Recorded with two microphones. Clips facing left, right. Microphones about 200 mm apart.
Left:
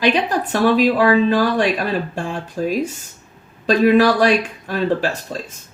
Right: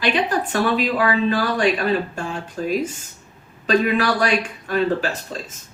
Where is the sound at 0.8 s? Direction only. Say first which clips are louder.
Left 6 dB; 40° left (ahead or behind).